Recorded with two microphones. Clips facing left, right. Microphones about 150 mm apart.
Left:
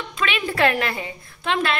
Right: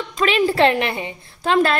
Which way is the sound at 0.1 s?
35° right (ahead or behind).